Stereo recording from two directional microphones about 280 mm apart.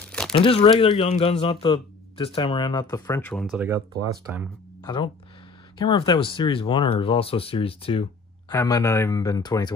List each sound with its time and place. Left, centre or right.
0.0 s crumpling: centre
0.4 s speech: centre
4.8 s speech: centre